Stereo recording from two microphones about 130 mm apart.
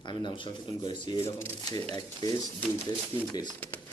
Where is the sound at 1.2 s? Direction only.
25° left (ahead or behind).